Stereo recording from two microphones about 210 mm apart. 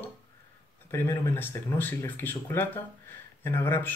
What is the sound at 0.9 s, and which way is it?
Speech, 10° left (ahead or behind).